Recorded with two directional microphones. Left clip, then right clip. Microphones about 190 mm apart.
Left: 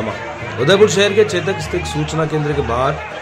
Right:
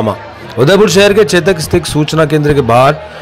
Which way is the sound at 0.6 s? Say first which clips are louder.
Right 5 dB; 40° right (ahead or behind).